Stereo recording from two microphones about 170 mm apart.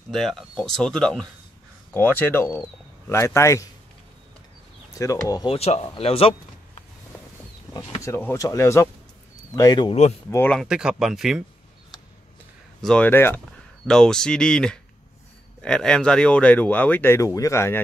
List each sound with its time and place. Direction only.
0.1 s speech: centre (ahead or behind); by 3.6 s 15° left (ahead or behind)
4.9 s speech: 20° left (ahead or behind)
5.5 s speech: 35° left (ahead or behind)
8.0 s speech: 15° left (ahead or behind)
10.3 s speech: 10° left (ahead or behind)
10.6 s speech: 5° right (ahead or behind)
12.8 s speech: 5° left (ahead or behind)